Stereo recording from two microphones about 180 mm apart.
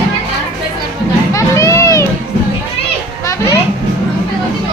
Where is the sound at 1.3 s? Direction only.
15° left (ahead or behind).